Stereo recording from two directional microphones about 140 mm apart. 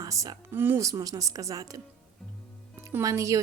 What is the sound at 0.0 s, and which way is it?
A woman's voice, 25° right (ahead or behind).